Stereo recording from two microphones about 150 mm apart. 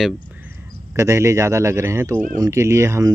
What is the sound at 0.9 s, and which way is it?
Speech, 20° right (ahead or behind).